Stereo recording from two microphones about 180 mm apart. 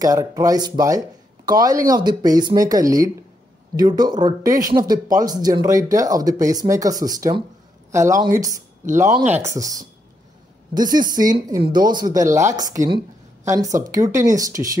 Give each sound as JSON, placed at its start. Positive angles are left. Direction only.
{"t": 0.0, "sound": "speech", "side_deg": -20}